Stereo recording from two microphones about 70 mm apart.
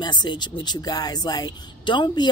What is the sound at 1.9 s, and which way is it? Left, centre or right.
Speech, left.